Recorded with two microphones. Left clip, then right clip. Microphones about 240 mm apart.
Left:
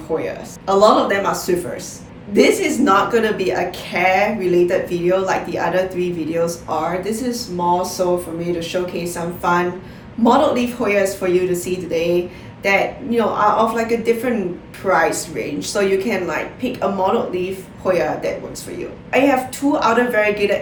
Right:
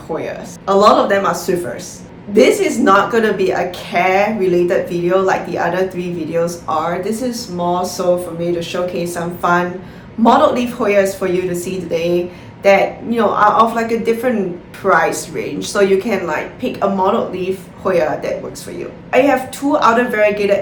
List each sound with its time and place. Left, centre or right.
0.7 s a woman's voice: centre